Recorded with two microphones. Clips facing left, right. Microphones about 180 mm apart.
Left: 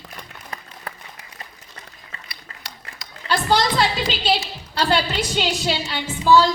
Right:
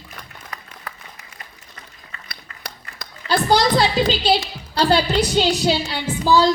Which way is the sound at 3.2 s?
40° right (ahead or behind).